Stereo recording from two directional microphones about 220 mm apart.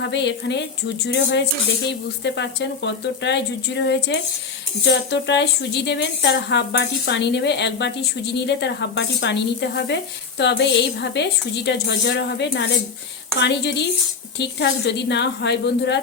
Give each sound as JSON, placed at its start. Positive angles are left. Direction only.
{"t": 0.0, "sound": "a woman's voice", "side_deg": 50}